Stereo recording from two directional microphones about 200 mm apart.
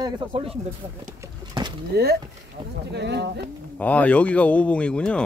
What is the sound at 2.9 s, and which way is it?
Speech, 60° right (ahead or behind).